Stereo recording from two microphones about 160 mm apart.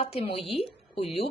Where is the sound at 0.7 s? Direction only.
35° left (ahead or behind).